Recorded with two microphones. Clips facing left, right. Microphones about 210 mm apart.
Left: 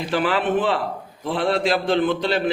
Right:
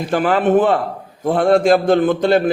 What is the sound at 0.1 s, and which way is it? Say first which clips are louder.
A man's voice: right 7 dB; 45° right (ahead or behind).